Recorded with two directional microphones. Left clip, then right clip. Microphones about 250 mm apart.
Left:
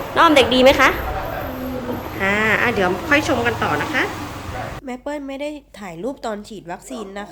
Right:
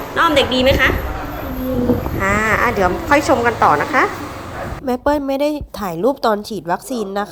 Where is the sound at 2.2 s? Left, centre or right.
Centre.